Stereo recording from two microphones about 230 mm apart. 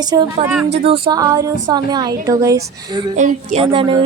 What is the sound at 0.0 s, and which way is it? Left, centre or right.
A woman's voice, centre.